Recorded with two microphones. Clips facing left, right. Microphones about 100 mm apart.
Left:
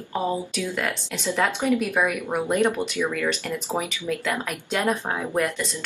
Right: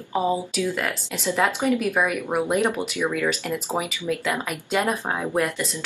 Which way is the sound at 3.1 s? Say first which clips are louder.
Right 2 dB; 5° right (ahead or behind).